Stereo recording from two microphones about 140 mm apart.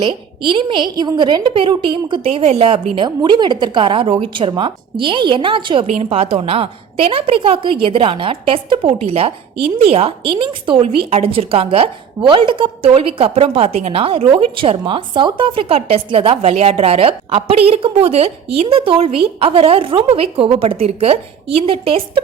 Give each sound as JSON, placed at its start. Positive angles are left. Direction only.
{"t": 0.0, "sound": "a woman's voice", "side_deg": -35}
{"t": 5.8, "sound": "a woman's voice", "side_deg": -45}